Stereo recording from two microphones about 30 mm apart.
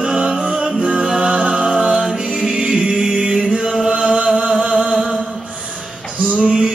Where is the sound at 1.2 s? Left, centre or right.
Right.